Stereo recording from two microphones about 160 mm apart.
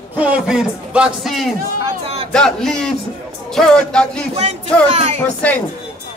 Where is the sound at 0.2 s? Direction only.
5° right (ahead or behind).